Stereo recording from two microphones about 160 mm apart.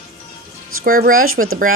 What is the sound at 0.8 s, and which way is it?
Speech, 60° right (ahead or behind).